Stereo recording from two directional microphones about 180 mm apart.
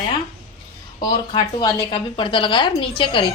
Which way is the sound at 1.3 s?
25° left (ahead or behind).